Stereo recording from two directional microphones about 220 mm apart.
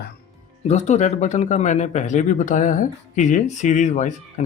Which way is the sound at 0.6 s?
30° left (ahead or behind).